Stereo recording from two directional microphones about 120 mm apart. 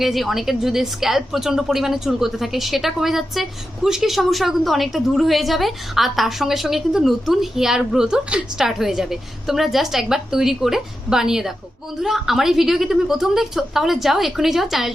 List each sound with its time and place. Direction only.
0.0 s a woman's voice: centre (ahead or behind)